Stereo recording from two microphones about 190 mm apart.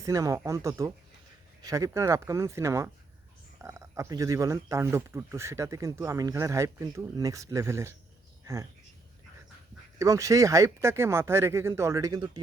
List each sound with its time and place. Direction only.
0.0 s speech: 15° right (ahead or behind)
10.0 s speech: 15° right (ahead or behind)